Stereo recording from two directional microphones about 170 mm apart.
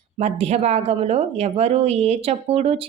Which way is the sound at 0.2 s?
40° right (ahead or behind).